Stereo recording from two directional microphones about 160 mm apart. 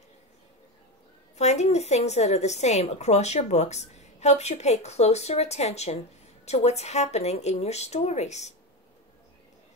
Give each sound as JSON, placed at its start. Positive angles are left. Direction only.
{"t": 1.4, "sound": "a woman's voice", "side_deg": 45}